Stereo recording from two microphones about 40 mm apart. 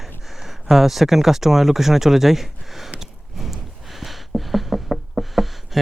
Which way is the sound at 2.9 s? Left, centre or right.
Centre.